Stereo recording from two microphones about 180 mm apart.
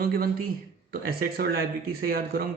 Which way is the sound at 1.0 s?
55° right (ahead or behind).